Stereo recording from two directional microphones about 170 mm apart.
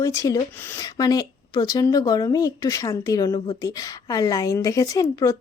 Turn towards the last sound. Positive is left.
turn(degrees=20)  # may be behind; listen again after turning